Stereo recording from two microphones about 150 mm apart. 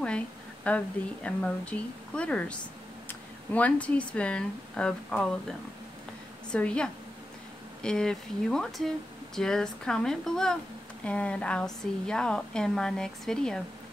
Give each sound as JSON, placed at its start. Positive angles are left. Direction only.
{"t": 0.7, "sound": "a woman's voice", "side_deg": 10}
{"t": 6.5, "sound": "a woman's voice", "side_deg": 5}